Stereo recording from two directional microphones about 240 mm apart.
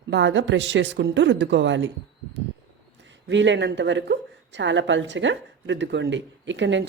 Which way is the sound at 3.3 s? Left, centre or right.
Right.